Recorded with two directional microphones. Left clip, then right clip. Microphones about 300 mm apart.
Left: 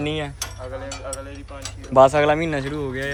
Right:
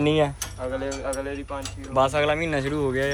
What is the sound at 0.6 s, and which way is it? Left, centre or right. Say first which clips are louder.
Speech: right 7 dB; right.